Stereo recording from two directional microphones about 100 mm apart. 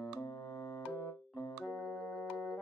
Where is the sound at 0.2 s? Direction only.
35° left (ahead or behind).